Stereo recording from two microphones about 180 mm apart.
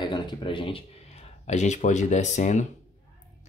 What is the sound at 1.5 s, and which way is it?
Speech, 40° left (ahead or behind).